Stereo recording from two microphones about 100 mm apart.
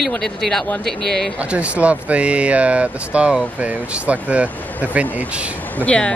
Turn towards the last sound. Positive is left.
turn(degrees=10)  # may be behind; listen again after turning